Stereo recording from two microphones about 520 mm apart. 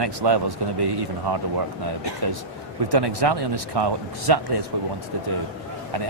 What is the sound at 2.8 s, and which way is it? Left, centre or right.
A man's voice, right.